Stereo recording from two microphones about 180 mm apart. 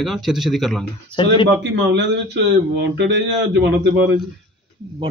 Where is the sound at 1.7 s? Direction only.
80° right.